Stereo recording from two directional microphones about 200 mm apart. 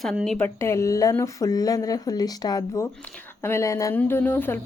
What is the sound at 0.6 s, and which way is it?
Speech, 15° left (ahead or behind).